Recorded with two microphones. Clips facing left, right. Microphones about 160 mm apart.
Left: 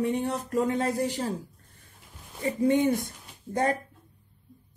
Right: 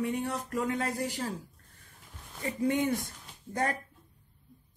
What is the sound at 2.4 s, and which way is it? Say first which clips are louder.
Speech: left 6 dB; 25° left (ahead or behind).